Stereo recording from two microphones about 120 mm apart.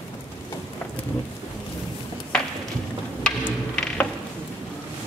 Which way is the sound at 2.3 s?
5° left (ahead or behind).